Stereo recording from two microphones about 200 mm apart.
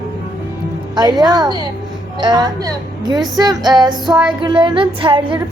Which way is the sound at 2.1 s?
20° right (ahead or behind).